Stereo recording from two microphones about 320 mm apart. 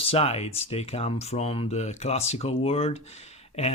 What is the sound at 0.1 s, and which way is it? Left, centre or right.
Speech, centre.